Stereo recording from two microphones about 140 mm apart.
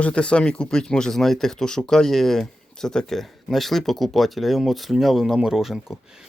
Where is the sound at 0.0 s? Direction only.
10° left (ahead or behind).